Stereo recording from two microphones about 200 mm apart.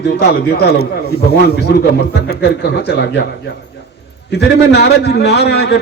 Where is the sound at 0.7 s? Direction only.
55° right (ahead or behind).